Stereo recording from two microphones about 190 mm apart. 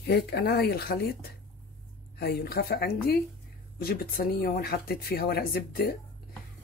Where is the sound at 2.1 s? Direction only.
55° left (ahead or behind).